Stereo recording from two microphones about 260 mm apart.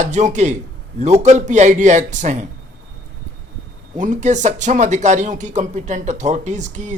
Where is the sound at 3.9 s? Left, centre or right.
Right.